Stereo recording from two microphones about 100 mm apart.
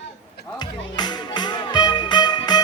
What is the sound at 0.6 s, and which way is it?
Music, 45° left (ahead or behind).